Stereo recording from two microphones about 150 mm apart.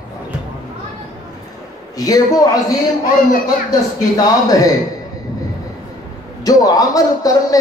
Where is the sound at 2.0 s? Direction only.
25° left (ahead or behind).